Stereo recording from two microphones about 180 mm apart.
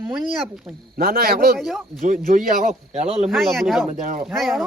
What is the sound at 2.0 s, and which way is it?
Speech, 45° right (ahead or behind).